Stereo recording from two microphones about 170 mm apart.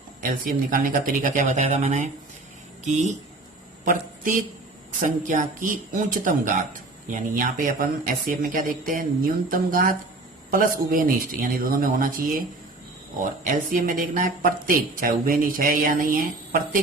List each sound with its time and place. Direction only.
0.2 s speech: 55° right (ahead or behind)